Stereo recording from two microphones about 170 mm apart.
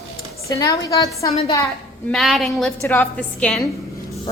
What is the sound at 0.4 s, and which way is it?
Speech, 20° left (ahead or behind).